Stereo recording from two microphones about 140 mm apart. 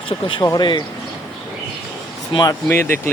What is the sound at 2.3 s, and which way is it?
Speech, 25° left (ahead or behind).